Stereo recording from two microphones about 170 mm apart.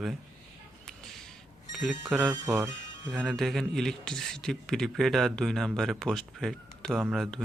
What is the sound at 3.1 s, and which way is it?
A man's voice, 10° right (ahead or behind).